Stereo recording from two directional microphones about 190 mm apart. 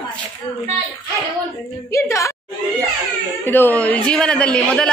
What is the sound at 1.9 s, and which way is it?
Speech, 15° left (ahead or behind).